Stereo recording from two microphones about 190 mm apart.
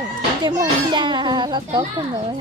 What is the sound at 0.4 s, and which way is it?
A child's voice, 25° right (ahead or behind).